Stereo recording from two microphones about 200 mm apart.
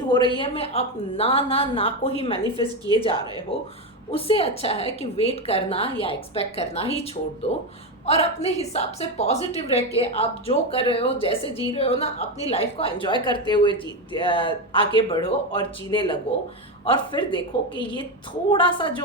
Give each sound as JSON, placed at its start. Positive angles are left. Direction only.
{"t": 0.1, "sound": "a woman's voice", "side_deg": 25}
{"t": 2.4, "sound": "a woman's voice", "side_deg": -20}
{"t": 3.5, "sound": "a woman's voice", "side_deg": 30}